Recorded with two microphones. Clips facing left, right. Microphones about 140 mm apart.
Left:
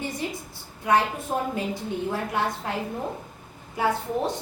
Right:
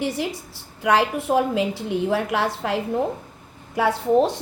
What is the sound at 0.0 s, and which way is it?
A woman's voice, 90° right.